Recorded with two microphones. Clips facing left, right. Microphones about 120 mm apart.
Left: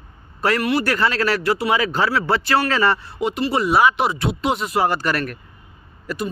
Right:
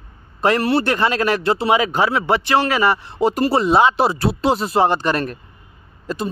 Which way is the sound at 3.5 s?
25° right (ahead or behind).